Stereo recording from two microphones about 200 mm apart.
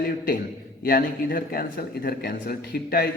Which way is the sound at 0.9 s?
45° left (ahead or behind).